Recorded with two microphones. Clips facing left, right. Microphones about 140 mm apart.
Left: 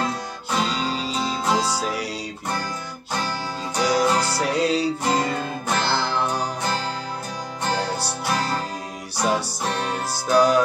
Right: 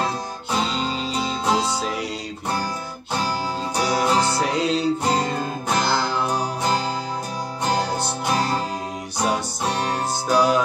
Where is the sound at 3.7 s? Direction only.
10° right (ahead or behind).